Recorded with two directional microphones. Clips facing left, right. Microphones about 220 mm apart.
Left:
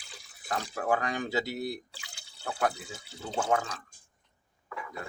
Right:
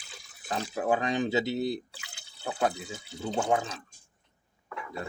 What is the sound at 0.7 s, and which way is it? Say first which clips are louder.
Speech: right 3 dB; 20° right (ahead or behind).